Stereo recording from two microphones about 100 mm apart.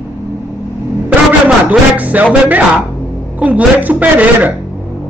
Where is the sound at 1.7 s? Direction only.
15° right (ahead or behind).